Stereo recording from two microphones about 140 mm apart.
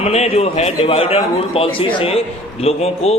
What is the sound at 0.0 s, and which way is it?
A man's voice, 50° left (ahead or behind).